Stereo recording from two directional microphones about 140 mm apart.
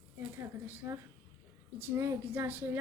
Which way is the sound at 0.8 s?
20° right (ahead or behind).